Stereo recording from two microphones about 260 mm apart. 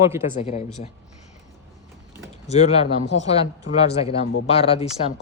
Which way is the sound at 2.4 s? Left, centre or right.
Left.